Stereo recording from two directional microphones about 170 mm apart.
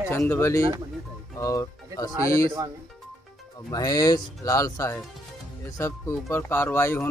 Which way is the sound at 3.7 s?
20° left (ahead or behind).